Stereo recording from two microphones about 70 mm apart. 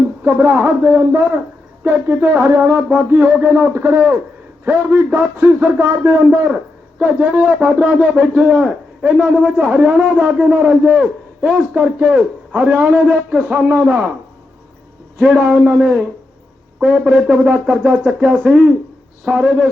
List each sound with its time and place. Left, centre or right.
0.3 s a man's voice: right
11.0 s a man's voice: centre
11.7 s a man's voice: right
15.2 s a man's voice: centre